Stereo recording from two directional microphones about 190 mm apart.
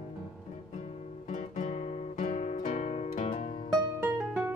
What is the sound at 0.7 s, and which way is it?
Guitar, 35° left (ahead or behind).